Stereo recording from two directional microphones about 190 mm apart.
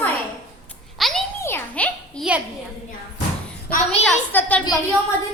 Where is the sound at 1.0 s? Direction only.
Centre (ahead or behind).